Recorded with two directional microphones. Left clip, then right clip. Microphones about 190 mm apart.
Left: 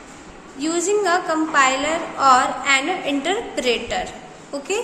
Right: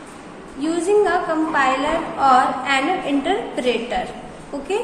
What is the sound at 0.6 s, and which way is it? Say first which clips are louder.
A woman's voice: right 3 dB; 30° left (ahead or behind).